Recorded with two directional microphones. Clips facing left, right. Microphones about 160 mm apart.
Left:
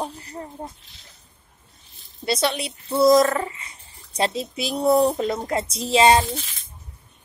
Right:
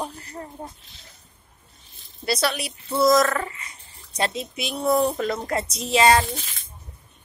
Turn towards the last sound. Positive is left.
turn(degrees=25)  # may be behind; listen again after turning